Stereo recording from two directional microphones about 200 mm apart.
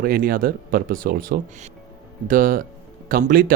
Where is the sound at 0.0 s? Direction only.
45° right (ahead or behind).